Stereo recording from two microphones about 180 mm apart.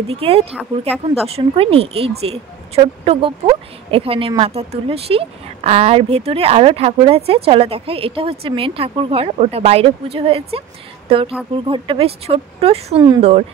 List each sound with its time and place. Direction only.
0.1 s a woman's voice: 35° right (ahead or behind)